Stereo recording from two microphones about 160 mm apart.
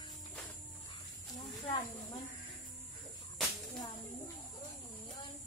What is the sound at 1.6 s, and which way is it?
Snake, 40° left (ahead or behind).